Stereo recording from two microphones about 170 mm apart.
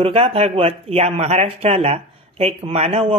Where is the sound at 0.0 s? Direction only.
35° right (ahead or behind).